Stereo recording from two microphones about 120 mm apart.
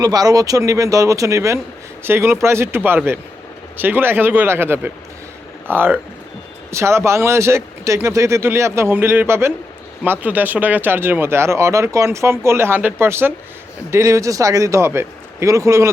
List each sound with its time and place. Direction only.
0.0 s speech: 30° right (ahead or behind)